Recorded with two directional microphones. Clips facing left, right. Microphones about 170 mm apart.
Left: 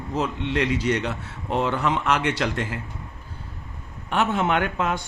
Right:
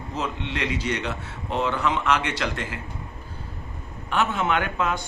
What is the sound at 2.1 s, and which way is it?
Speech, 40° left (ahead or behind).